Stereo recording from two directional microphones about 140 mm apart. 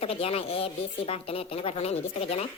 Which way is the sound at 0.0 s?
45° left (ahead or behind).